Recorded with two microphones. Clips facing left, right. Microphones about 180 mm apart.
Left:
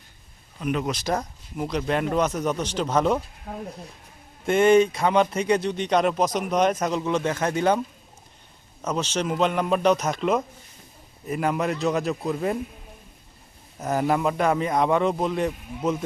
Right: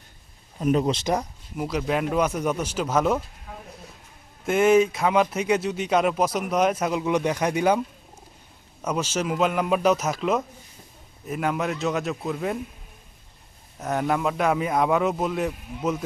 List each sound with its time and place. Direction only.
0.6 s speech: 35° right (ahead or behind)
1.1 s speech: 5° right (ahead or behind)
4.4 s speech: 5° right (ahead or behind)
8.8 s speech: 10° right (ahead or behind)
13.7 s speech: centre (ahead or behind)